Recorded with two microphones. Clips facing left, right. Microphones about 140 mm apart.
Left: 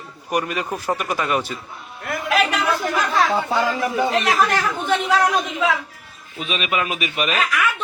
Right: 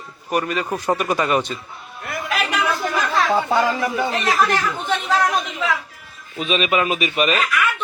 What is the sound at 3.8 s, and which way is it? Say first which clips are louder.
Speech: left 1 dB; 15° left (ahead or behind).